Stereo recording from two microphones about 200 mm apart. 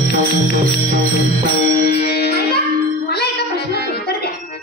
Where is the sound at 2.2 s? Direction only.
55° left (ahead or behind).